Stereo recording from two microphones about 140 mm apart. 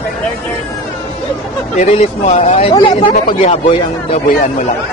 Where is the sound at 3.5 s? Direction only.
50° left (ahead or behind).